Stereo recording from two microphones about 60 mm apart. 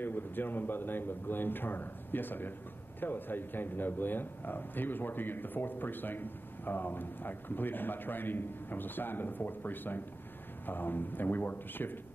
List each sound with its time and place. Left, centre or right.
0.0 s a man's voice: left